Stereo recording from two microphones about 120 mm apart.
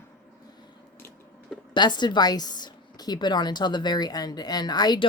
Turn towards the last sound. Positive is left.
turn(degrees=35)  # may be behind; listen again after turning